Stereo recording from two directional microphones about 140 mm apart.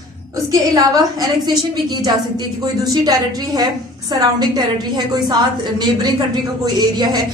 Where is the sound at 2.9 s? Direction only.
30° right (ahead or behind).